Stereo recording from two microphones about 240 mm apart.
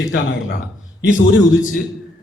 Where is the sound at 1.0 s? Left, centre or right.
Left.